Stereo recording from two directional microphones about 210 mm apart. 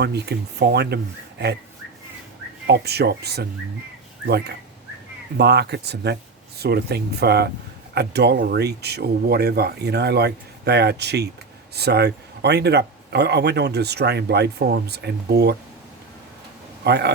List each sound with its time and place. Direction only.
0.0 s speech: 50° right (ahead or behind)
2.6 s speech: 50° right (ahead or behind)
16.8 s a man's voice: 55° right (ahead or behind)